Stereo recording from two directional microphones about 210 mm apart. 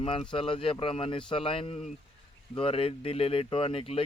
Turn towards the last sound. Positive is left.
turn(degrees=25)  # may be behind; listen again after turning